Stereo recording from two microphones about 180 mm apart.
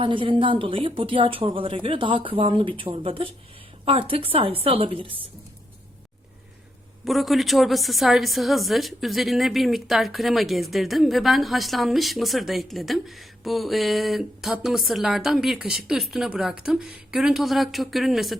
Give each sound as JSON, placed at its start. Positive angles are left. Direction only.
{"t": 0.0, "sound": "a woman's voice", "side_deg": -30}
{"t": 7.0, "sound": "a woman's voice", "side_deg": 0}